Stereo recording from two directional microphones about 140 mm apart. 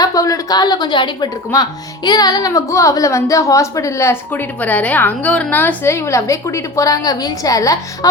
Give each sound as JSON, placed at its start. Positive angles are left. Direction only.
{"t": 0.0, "sound": "a woman's voice", "side_deg": 25}